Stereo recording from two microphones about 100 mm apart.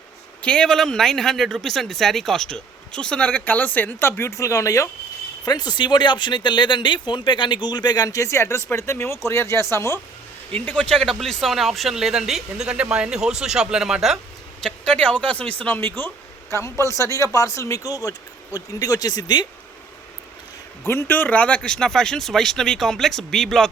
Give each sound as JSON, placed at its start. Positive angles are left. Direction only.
{"t": 0.4, "sound": "speech", "side_deg": 10}
{"t": 5.5, "sound": "speech", "side_deg": 45}
{"t": 10.5, "sound": "speech", "side_deg": 10}
{"t": 14.6, "sound": "a man's voice", "side_deg": 10}
{"t": 20.8, "sound": "speech", "side_deg": 20}